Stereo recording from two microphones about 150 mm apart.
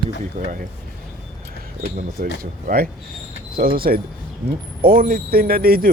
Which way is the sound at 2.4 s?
75° right (ahead or behind).